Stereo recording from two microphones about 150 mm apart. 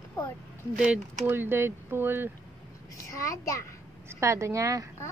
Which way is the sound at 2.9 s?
20° left (ahead or behind).